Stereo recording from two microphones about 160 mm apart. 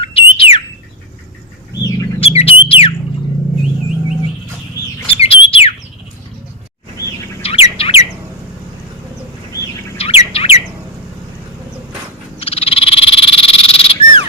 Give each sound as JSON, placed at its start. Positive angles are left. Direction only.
{"t": 0.0, "sound": "bird", "side_deg": 35}
{"t": 2.2, "sound": "a sound", "side_deg": 40}
{"t": 5.2, "sound": "bird", "side_deg": 35}
{"t": 7.4, "sound": "bird", "side_deg": 40}
{"t": 10.0, "sound": "bird", "side_deg": 40}
{"t": 12.4, "sound": "frog", "side_deg": 35}